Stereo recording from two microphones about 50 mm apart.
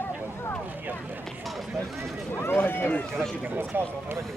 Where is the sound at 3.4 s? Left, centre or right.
Right.